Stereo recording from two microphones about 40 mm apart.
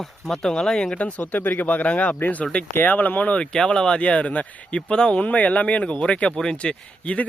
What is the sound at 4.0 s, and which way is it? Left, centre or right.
Speech, left.